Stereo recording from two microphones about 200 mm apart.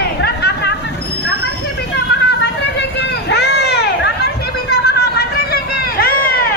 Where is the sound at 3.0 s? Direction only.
55° left (ahead or behind).